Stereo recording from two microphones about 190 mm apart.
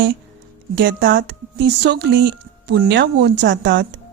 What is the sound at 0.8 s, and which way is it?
Speech, 50° right (ahead or behind).